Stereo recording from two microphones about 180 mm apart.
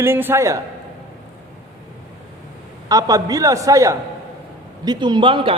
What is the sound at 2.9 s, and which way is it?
A man's voice, 20° right (ahead or behind).